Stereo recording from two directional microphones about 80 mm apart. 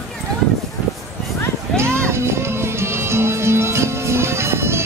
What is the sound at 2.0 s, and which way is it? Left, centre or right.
Music, right.